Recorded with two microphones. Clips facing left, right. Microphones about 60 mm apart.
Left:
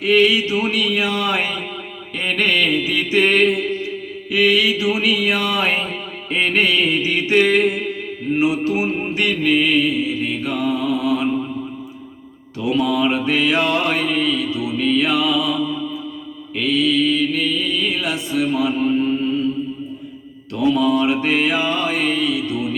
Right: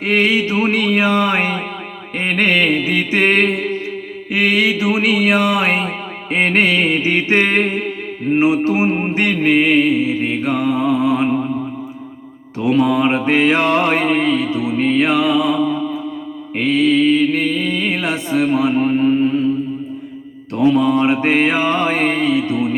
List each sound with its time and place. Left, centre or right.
0.0 s mantra: right
12.5 s mantra: right
20.6 s mantra: right